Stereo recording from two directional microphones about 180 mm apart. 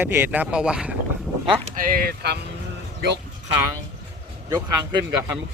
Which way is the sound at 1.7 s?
55° right (ahead or behind).